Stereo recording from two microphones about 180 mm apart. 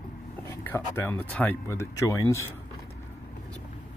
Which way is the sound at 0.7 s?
10° left (ahead or behind).